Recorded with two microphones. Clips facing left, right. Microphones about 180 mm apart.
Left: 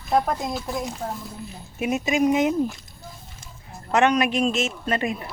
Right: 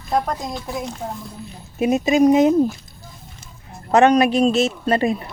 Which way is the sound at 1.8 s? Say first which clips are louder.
Right 6 dB; 35° right (ahead or behind).